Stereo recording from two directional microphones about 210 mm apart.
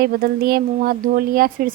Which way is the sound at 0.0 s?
45° right (ahead or behind).